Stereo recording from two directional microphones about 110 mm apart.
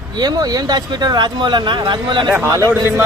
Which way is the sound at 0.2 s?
35° right (ahead or behind).